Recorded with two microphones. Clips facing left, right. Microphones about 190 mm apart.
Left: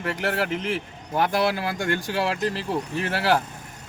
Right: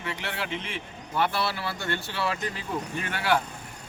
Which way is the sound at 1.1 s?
45° left (ahead or behind).